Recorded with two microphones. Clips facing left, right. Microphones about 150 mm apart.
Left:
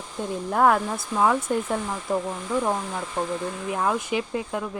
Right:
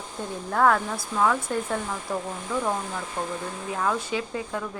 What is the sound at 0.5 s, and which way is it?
A woman's voice, 15° left (ahead or behind).